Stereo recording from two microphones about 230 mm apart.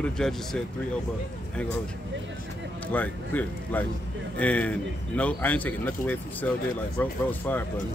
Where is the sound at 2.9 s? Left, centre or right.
Centre.